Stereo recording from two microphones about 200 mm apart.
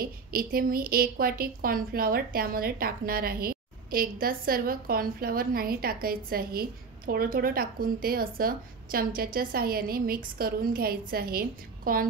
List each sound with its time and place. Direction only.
0.0 s a woman's voice: 45° right (ahead or behind)